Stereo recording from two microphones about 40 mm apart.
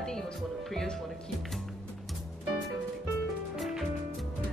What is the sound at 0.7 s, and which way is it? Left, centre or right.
Speech, centre.